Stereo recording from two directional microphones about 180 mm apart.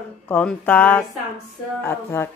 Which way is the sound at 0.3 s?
5° left (ahead or behind).